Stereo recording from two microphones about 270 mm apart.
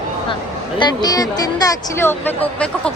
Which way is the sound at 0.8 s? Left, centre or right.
Centre.